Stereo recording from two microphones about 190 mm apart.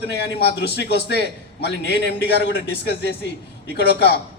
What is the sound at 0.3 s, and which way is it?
Speech, 60° left (ahead or behind).